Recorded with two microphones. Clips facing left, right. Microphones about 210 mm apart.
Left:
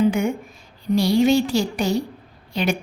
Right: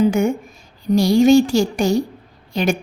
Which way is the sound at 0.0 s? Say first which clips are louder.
Right 3 dB; 45° right (ahead or behind).